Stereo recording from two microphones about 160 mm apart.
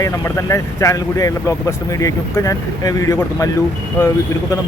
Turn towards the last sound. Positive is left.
turn(degrees=20)  # may be behind; listen again after turning